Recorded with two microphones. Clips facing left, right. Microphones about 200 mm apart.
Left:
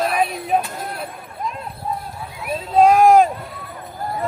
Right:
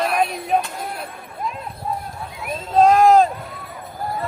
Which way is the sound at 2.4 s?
10° left (ahead or behind).